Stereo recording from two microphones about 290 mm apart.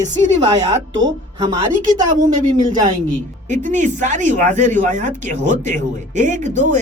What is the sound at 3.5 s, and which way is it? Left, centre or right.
Speech, right.